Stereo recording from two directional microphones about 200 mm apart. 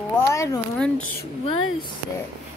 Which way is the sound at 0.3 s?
15° left (ahead or behind).